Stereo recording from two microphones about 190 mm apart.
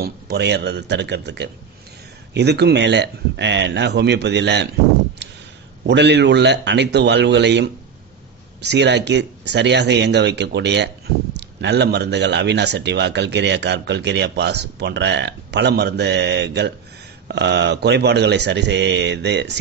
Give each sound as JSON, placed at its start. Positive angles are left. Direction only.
{"t": 0.0, "sound": "speech", "side_deg": -60}
{"t": 5.9, "sound": "speech", "side_deg": -65}